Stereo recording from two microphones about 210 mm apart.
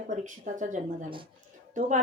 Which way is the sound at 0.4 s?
35° right (ahead or behind).